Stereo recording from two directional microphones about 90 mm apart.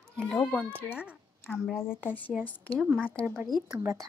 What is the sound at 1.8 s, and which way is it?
Speech, 25° left (ahead or behind).